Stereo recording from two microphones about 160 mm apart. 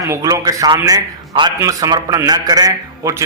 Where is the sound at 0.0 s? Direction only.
20° right (ahead or behind).